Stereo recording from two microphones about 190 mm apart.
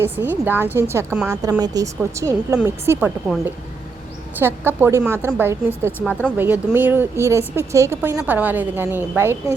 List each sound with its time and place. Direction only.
0.0 s speech: 10° right (ahead or behind)
4.4 s speech: 10° right (ahead or behind)
6.1 s speech: 5° left (ahead or behind)
6.3 s speech: 10° right (ahead or behind)